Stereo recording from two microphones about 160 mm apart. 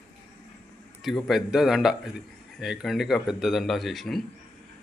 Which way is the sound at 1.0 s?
Centre (ahead or behind).